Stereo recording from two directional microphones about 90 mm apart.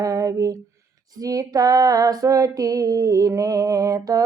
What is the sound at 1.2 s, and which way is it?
Female singing, 40° right (ahead or behind).